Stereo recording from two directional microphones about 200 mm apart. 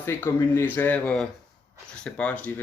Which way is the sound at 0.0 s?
10° left (ahead or behind).